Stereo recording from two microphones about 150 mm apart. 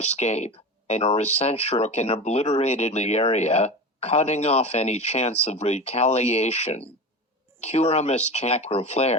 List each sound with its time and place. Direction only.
0.0 s speech: 50° left (ahead or behind)